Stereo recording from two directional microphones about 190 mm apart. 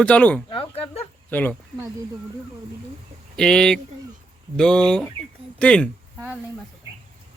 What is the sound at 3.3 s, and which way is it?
Speech, 5° left (ahead or behind).